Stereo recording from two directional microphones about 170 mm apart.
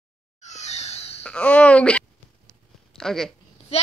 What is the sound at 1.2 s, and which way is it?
Speech, 5° left (ahead or behind).